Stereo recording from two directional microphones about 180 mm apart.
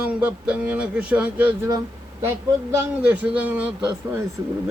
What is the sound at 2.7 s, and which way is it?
Speech, 10° right (ahead or behind).